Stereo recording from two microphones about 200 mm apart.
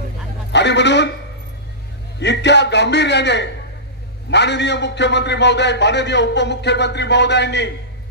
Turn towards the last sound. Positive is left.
turn(degrees=60)  # may be behind; listen again after turning